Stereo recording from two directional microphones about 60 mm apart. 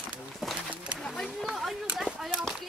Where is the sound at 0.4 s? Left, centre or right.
Centre.